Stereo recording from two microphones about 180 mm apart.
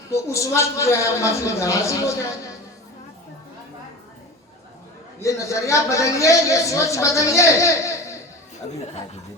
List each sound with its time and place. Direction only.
0.1 s a woman's voice: 15° left (ahead or behind)
5.2 s a woman's voice: 15° left (ahead or behind)